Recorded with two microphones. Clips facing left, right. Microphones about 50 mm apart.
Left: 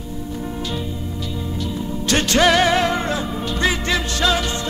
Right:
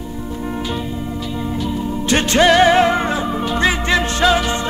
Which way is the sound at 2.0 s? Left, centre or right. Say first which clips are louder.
Right 2 dB; right.